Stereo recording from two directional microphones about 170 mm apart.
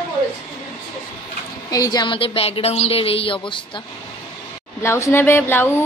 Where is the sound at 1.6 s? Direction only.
20° left (ahead or behind).